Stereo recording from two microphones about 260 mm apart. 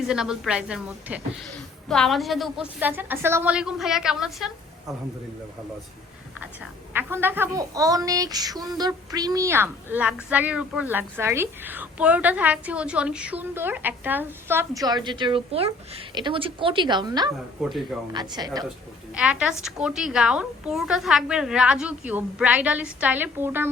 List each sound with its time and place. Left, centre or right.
0.1 s a woman's voice: centre
6.9 s a woman's voice: centre
17.6 s a woman's voice: centre
18.1 s a woman's voice: centre
19.1 s a woman's voice: centre